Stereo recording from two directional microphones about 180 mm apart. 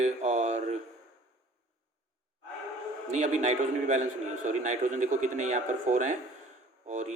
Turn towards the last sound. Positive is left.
turn(degrees=-45)  # may be behind; listen again after turning